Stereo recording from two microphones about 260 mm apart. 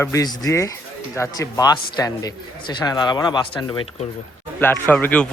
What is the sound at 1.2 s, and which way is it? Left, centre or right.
Speech, centre.